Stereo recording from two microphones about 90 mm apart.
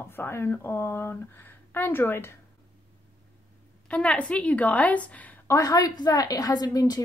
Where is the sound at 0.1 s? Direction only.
25° left (ahead or behind).